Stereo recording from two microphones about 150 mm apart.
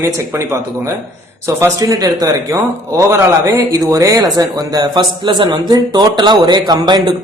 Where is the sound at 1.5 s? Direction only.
20° right (ahead or behind).